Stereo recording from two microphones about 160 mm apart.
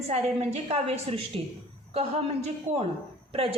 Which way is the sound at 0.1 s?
45° right (ahead or behind).